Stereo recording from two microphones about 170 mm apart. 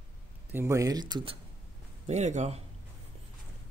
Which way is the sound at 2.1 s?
45° right (ahead or behind).